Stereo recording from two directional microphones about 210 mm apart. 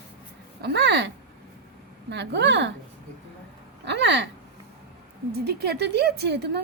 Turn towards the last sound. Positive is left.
turn(degrees=-50)  # may be behind; listen again after turning